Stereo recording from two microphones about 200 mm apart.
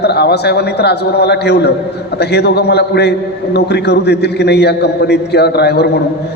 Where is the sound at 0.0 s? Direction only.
55° left (ahead or behind).